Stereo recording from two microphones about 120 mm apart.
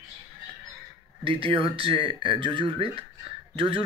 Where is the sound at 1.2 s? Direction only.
50° right (ahead or behind).